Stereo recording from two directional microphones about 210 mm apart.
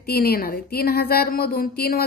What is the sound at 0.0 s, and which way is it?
Speech, 45° left (ahead or behind).